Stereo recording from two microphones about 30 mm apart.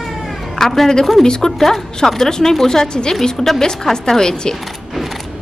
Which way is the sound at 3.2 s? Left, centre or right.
Centre.